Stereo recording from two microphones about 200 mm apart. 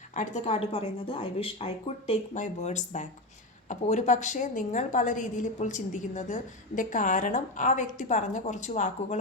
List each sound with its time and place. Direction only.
0.1 s a woman's voice: 40° left (ahead or behind)